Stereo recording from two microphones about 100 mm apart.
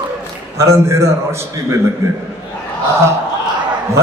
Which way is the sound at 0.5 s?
30° right (ahead or behind).